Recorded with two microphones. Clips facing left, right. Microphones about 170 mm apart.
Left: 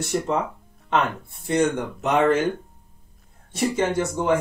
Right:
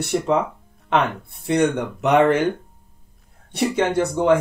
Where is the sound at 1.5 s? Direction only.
65° right (ahead or behind).